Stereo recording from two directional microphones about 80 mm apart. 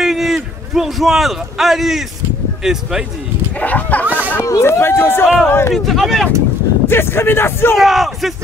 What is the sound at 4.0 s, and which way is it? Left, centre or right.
Speech, right.